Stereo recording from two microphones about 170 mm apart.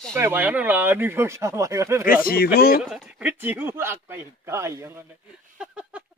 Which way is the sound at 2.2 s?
65° left (ahead or behind).